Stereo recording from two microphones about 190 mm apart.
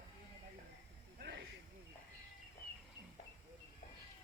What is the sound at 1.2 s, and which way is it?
Snake, 60° right (ahead or behind).